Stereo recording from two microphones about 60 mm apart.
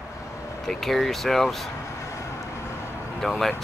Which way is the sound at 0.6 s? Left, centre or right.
Centre.